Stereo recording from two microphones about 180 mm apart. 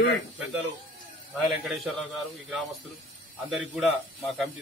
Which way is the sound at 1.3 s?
Centre (ahead or behind).